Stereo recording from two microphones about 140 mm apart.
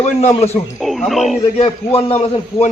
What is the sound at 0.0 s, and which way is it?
Speech, 50° left (ahead or behind).